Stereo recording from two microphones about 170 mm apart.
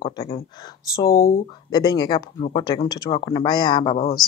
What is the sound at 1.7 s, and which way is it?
Speech, 25° left (ahead or behind).